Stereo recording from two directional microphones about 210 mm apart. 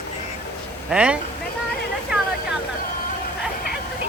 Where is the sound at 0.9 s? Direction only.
5° right (ahead or behind).